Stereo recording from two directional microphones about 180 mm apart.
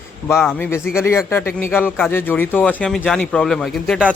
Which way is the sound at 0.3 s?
15° left (ahead or behind).